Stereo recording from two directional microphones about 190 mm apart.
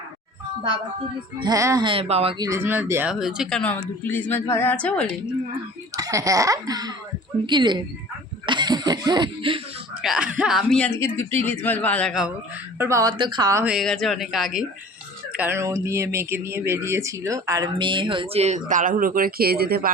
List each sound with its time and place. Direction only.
1.4 s speech: 20° right (ahead or behind)
2.4 s speech: 15° right (ahead or behind); by 5.1 s 5° left (ahead or behind)
5.9 s speech: 20° right (ahead or behind)
8.4 s chuckle: 25° right (ahead or behind)
9.9 s a man's voice: 5° right (ahead or behind)
12.8 s speech: 15° right (ahead or behind)
13.7 s speech: centre (ahead or behind); by 18.6 s 35° right (ahead or behind)
18.7 s speech: 45° right (ahead or behind)